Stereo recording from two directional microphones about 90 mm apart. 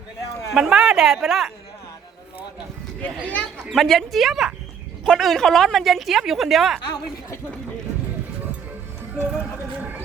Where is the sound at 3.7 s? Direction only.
Centre (ahead or behind).